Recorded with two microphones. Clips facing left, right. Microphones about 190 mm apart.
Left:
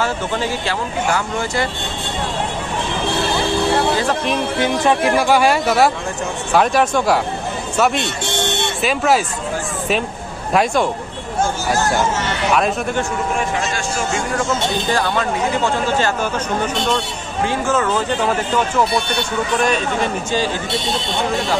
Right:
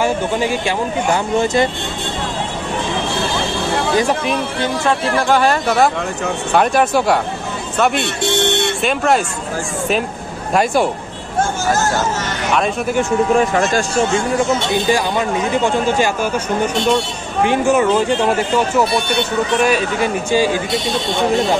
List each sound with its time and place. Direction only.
0.0 s speech: 15° right (ahead or behind)
3.9 s music: 15° right (ahead or behind)
4.6 s speech: 15° left (ahead or behind)
10.5 s speech: 5° right (ahead or behind)
14.5 s speech: 15° right (ahead or behind)
17.5 s speech: 15° right (ahead or behind)
19.6 s speech: 10° right (ahead or behind)